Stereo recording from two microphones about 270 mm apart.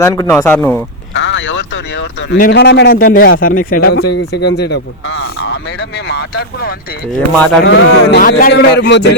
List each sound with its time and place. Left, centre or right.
0.0 s speech: centre
1.1 s a man's voice: left
7.1 s speech: centre
7.6 s a man's voice: left